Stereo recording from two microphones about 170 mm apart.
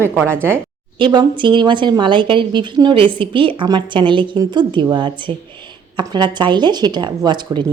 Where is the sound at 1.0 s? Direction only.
25° right (ahead or behind).